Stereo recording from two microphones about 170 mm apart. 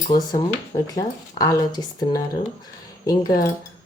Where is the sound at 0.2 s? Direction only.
20° left (ahead or behind).